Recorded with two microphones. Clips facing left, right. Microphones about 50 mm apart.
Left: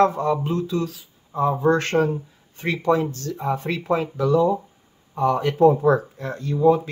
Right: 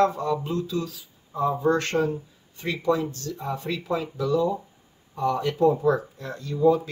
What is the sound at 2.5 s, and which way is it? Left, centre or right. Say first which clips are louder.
Speech: left 4 dB; left.